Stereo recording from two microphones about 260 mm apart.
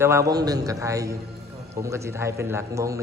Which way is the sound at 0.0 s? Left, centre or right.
Centre.